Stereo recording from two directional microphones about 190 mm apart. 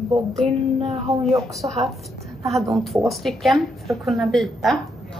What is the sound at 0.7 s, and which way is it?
A woman's voice, 30° right (ahead or behind).